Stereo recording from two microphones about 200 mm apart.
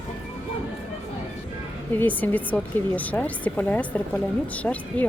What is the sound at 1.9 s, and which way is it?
A woman's voice, 10° left (ahead or behind).